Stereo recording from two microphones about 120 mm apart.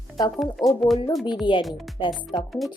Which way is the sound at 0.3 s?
Centre (ahead or behind).